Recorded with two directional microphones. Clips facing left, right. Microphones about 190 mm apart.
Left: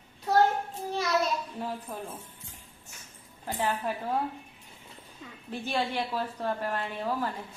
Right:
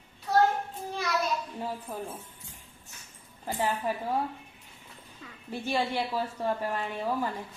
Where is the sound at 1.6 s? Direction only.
10° right (ahead or behind).